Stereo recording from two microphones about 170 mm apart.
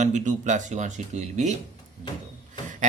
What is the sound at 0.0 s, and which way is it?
Speech, 45° right (ahead or behind).